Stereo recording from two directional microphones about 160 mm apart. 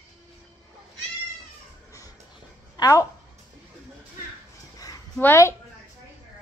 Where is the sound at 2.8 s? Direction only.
20° left (ahead or behind).